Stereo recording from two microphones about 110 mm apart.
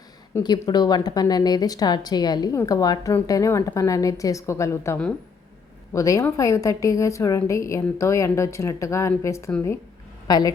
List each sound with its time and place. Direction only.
0.3 s a woman's voice: 20° left (ahead or behind)
0.7 s a woman's voice: 40° left (ahead or behind)
9.5 s speech: 15° left (ahead or behind)
10.2 s a woman's voice: 35° left (ahead or behind)